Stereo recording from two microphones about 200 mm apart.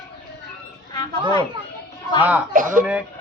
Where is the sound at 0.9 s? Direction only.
20° left (ahead or behind).